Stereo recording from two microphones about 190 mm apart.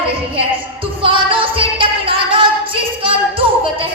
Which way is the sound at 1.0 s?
25° right (ahead or behind).